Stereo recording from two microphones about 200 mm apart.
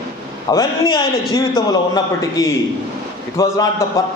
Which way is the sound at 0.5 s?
20° left (ahead or behind).